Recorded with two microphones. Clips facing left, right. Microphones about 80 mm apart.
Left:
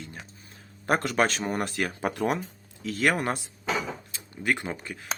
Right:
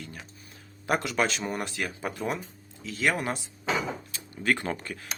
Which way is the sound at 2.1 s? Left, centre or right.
Left.